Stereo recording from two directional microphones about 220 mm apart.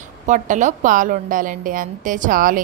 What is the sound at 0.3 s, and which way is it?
A woman's voice, 35° right (ahead or behind).